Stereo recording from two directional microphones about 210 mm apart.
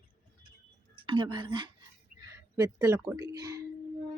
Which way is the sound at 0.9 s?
25° right (ahead or behind).